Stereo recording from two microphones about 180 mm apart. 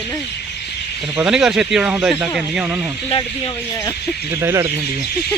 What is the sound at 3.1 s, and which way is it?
Speech, 30° left (ahead or behind).